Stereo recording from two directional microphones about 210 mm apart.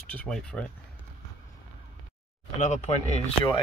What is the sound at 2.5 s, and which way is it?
Speech, 35° left (ahead or behind).